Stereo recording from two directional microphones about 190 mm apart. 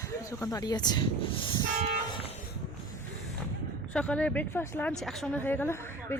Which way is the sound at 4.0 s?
5° left (ahead or behind).